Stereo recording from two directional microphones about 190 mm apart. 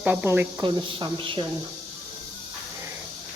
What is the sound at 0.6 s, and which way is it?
Speech, 25° right (ahead or behind).